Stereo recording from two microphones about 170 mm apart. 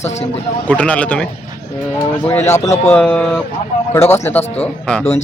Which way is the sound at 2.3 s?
15° left (ahead or behind).